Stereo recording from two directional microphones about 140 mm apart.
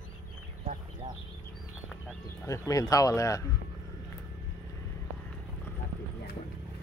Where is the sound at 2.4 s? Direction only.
20° left (ahead or behind).